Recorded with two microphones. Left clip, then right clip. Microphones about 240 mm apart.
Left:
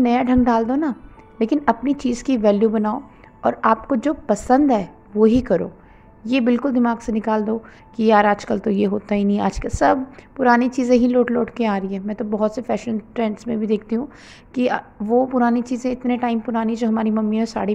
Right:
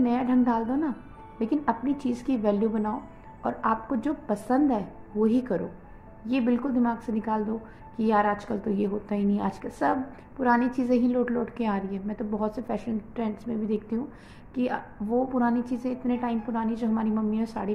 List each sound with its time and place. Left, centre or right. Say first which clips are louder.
0.0 s a woman's voice: left 8 dB; left